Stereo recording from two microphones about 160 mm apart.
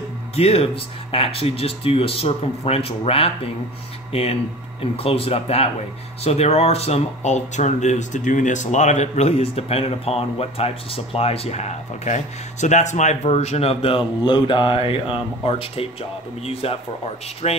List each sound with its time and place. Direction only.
0.4 s speech: 40° left (ahead or behind)